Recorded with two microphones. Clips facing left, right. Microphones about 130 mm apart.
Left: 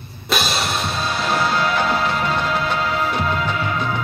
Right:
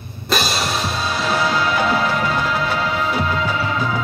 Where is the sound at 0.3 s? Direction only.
Centre (ahead or behind).